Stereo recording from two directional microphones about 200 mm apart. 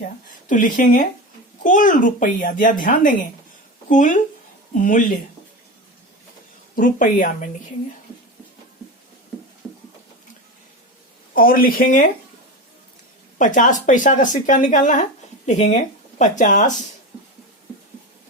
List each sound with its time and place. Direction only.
0.4 s speech: 40° left (ahead or behind)
6.7 s speech: 40° left (ahead or behind)
11.3 s speech: 45° left (ahead or behind)
13.4 s speech: 40° left (ahead or behind)